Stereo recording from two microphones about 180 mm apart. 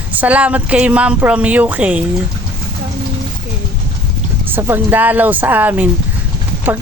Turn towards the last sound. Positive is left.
turn(degrees=-10)  # may be behind; listen again after turning